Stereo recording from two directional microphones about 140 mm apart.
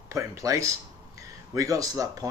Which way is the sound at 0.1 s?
20° right (ahead or behind).